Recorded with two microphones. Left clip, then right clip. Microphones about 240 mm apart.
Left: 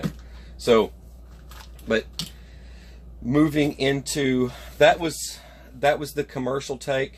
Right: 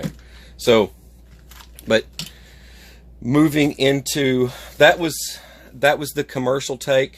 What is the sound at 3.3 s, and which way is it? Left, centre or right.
Speech, right.